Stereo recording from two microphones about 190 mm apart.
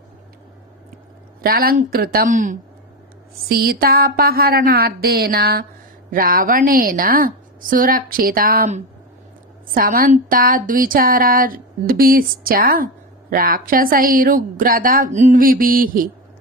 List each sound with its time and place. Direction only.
1.4 s speech: 50° right (ahead or behind)